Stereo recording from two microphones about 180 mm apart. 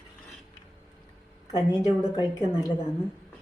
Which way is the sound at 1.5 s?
20° left (ahead or behind).